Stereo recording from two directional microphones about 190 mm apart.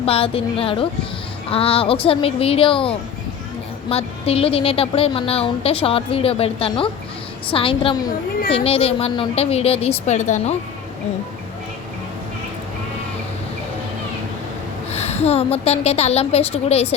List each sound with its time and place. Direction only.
0.0 s a woman's voice: 30° left (ahead or behind)
14.8 s a woman's voice: 35° left (ahead or behind)